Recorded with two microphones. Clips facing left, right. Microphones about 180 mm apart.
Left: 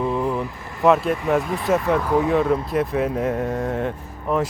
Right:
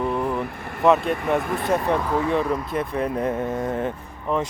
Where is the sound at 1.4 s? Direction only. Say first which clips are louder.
Left 1 dB; 55° right (ahead or behind).